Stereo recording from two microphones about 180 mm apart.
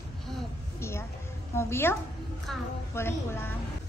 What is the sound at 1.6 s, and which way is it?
Speech, 15° left (ahead or behind).